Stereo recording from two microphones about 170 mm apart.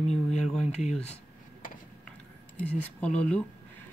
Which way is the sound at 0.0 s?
40° left (ahead or behind).